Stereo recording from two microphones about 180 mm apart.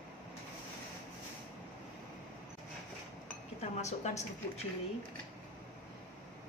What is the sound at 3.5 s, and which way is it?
Speech, 40° left (ahead or behind).